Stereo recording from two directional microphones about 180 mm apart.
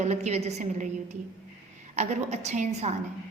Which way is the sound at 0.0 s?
40° right (ahead or behind).